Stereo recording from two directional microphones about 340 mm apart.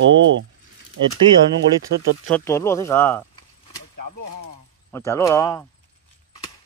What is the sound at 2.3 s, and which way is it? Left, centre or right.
Speech, centre.